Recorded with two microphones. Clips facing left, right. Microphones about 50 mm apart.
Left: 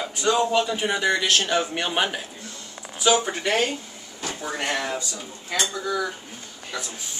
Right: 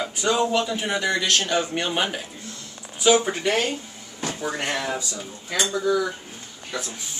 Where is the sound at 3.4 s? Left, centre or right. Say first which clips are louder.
Even; left.